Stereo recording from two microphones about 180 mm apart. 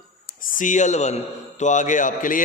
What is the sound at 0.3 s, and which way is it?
A man's voice, 45° left (ahead or behind).